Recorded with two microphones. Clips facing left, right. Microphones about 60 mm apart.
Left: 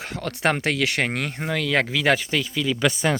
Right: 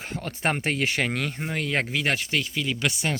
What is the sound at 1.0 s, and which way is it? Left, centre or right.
Speech, left.